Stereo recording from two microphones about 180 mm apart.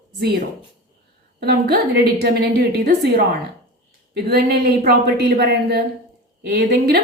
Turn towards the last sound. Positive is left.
turn(degrees=-65)  # may be behind; listen again after turning